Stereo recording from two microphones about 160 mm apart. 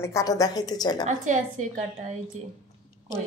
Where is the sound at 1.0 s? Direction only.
50° right (ahead or behind).